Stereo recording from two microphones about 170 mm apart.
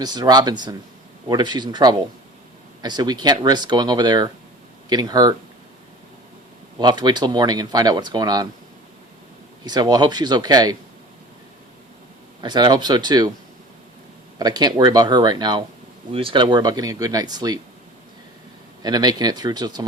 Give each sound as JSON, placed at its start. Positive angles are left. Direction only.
{"t": 0.0, "sound": "speech", "side_deg": -25}
{"t": 6.7, "sound": "speech", "side_deg": -25}
{"t": 9.6, "sound": "speech", "side_deg": -25}
{"t": 12.4, "sound": "speech", "side_deg": -25}
{"t": 14.3, "sound": "speech", "side_deg": -25}
{"t": 18.8, "sound": "speech", "side_deg": -25}